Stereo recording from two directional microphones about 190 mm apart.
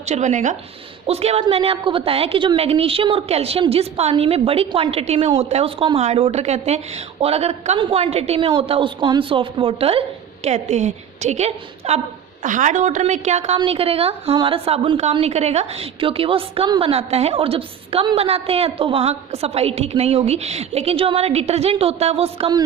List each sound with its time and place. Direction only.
0.0 s a woman's voice: 35° right (ahead or behind)